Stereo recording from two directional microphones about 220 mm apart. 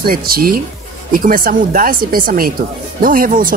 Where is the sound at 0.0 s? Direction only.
40° right (ahead or behind).